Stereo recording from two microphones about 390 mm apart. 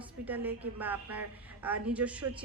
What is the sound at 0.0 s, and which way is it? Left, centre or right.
A woman's voice, centre.